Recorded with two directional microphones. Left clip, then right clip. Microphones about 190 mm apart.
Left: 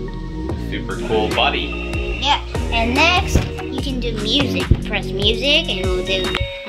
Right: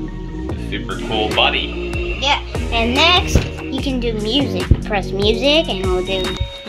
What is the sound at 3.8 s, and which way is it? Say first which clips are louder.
Speech: right 3 dB; 50° right (ahead or behind).